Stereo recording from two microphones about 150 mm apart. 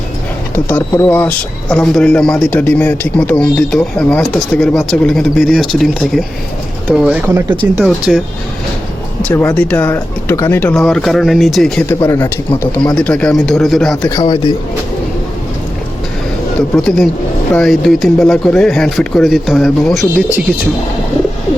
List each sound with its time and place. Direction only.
0.5 s a man's voice: 15° left (ahead or behind); by 8.2 s 5° right (ahead or behind)
9.3 s speech: 15° left (ahead or behind)
10.8 s a man's voice: centre (ahead or behind)
11.9 s speech: 15° left (ahead or behind)
14.1 s a man's voice: 25° left (ahead or behind)
16.6 s a man's voice: 5° left (ahead or behind)